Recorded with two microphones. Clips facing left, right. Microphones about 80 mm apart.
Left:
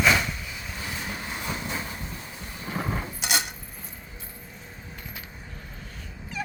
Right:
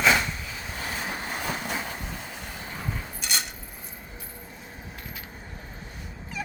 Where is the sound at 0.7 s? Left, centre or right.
Right.